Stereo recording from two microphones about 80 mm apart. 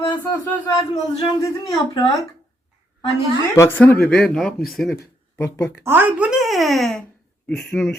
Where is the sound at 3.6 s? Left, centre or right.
Left.